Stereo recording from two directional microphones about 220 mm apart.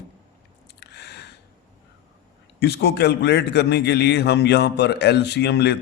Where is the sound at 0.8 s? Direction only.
50° left (ahead or behind).